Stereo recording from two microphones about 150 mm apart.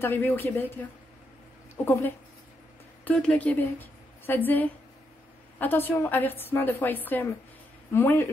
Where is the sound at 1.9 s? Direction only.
15° left (ahead or behind).